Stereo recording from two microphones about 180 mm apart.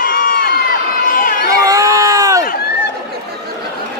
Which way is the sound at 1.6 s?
20° right (ahead or behind).